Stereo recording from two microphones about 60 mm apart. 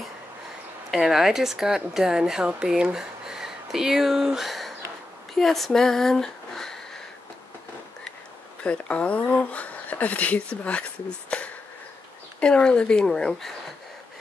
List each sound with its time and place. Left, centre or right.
0.9 s speech: centre
8.6 s speech: left